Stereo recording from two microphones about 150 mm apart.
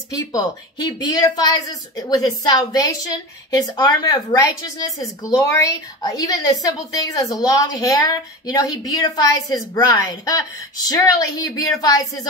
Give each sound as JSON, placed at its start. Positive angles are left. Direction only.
{"t": 0.1, "sound": "speech", "side_deg": 25}